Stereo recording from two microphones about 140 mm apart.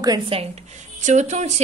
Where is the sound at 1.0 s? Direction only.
55° right (ahead or behind).